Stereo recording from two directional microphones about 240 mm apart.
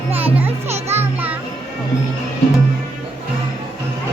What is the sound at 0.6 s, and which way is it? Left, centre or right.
Music, right.